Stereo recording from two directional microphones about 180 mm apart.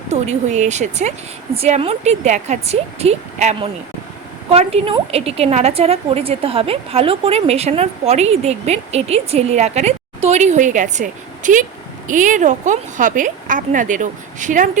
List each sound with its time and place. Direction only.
0.1 s a woman's voice: 40° right (ahead or behind)